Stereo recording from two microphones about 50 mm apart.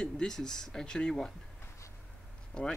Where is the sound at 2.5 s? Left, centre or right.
Centre.